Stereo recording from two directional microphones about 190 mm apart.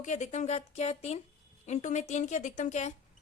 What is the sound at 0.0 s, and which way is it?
A woman's voice, 40° left (ahead or behind).